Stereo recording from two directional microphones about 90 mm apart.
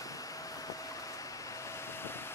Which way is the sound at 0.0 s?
40° left (ahead or behind).